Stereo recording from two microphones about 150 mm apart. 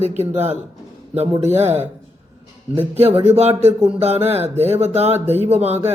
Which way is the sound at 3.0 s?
40° right (ahead or behind).